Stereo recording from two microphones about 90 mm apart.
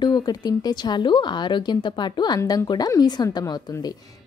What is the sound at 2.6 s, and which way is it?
Speech, 45° left (ahead or behind).